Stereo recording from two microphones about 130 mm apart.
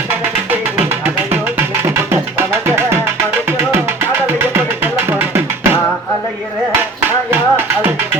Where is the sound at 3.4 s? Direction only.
20° right (ahead or behind).